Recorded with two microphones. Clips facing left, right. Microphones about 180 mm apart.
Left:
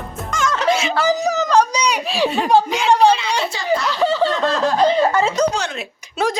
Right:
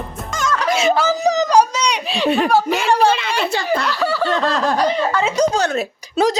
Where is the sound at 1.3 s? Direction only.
15° right (ahead or behind).